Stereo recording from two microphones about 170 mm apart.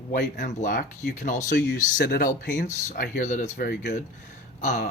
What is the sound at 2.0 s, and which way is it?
Speech, 60° left (ahead or behind).